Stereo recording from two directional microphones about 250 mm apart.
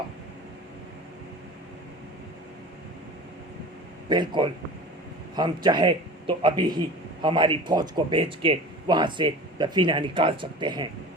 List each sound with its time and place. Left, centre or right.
4.1 s a man's voice: centre